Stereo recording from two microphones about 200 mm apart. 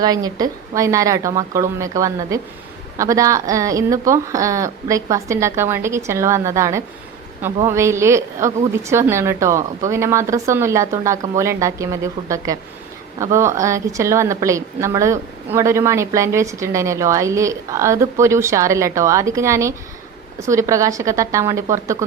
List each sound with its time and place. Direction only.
0.0 s a woman's voice: 20° right (ahead or behind)